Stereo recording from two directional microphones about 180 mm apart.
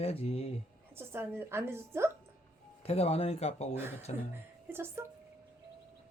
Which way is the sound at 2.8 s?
35° left (ahead or behind).